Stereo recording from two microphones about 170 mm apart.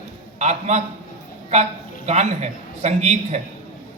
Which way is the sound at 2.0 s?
40° right (ahead or behind).